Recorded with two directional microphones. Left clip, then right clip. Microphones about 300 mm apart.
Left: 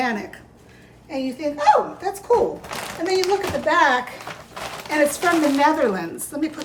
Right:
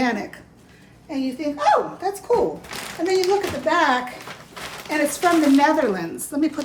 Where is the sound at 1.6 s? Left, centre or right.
Centre.